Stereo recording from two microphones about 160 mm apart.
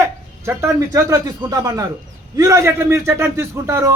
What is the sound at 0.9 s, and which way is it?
A man's voice, 20° right (ahead or behind).